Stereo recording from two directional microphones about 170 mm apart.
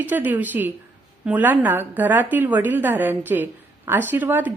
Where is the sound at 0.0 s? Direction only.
10° right (ahead or behind).